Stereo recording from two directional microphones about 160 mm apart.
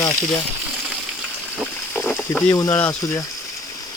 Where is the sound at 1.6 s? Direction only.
Centre (ahead or behind).